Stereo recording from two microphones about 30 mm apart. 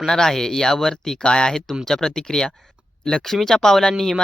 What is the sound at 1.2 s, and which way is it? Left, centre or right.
Speech, left.